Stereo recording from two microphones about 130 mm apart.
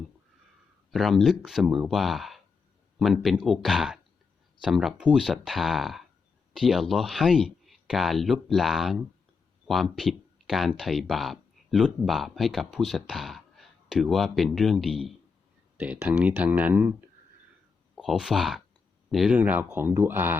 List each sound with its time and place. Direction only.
0.9 s speech: centre (ahead or behind)
15.8 s speech: 10° right (ahead or behind)
17.9 s speech: centre (ahead or behind)
19.4 s speech: 15° right (ahead or behind)